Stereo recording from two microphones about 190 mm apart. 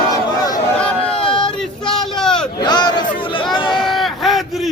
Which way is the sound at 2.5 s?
20° left (ahead or behind).